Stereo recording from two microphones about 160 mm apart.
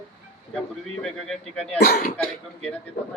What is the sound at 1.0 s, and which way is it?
Speech, 5° left (ahead or behind).